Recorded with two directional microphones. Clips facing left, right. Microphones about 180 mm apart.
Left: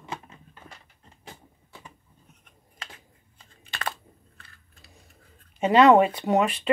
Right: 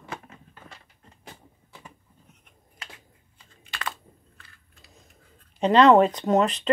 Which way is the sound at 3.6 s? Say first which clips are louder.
Left 1 dB; 35° left (ahead or behind).